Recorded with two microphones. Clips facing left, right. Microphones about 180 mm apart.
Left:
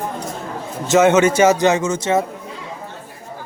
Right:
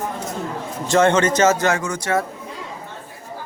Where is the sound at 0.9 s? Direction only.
5° left (ahead or behind).